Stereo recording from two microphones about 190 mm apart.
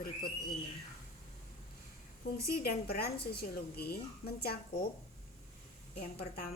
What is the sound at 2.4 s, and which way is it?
A woman's voice, 55° left (ahead or behind).